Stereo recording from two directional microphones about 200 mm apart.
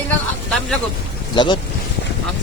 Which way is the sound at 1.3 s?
20° left (ahead or behind).